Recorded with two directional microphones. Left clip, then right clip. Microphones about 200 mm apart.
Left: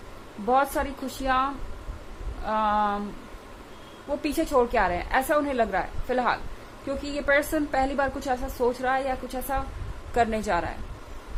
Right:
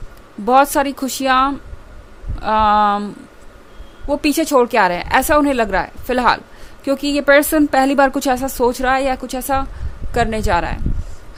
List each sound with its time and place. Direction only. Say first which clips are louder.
0.4 s a woman's voice: right 11 dB; 50° right (ahead or behind)
4.2 s a woman's voice: right 9 dB; 50° right (ahead or behind)
10.2 s a woman's voice: right 7 dB; 40° right (ahead or behind)